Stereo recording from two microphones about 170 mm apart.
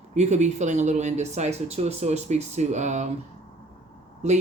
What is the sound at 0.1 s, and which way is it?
Speech, 45° right (ahead or behind).